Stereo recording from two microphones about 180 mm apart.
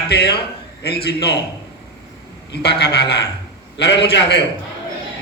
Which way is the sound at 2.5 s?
65° left (ahead or behind).